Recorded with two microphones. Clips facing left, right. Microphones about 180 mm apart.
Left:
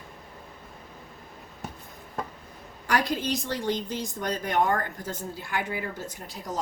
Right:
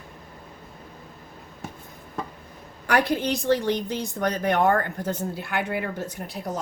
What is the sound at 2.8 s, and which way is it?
A woman's voice, 60° right (ahead or behind).